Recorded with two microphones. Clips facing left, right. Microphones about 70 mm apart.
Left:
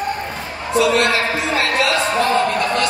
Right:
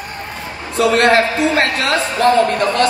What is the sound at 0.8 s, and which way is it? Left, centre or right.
Speech, right.